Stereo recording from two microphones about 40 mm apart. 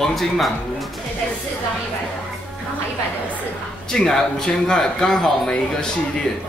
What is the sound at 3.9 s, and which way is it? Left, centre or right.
Speech, centre.